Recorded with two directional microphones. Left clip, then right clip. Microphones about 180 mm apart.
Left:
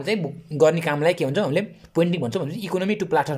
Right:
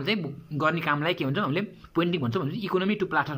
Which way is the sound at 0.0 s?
25° left (ahead or behind).